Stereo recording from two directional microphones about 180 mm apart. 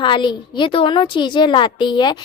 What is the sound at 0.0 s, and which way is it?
Speech, 25° left (ahead or behind).